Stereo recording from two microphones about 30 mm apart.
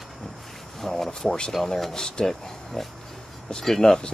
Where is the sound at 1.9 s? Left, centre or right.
Left.